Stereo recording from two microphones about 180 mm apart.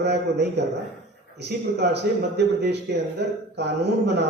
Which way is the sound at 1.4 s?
65° right (ahead or behind).